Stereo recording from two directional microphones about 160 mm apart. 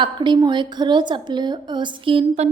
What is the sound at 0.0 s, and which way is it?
A woman's voice, 30° right (ahead or behind).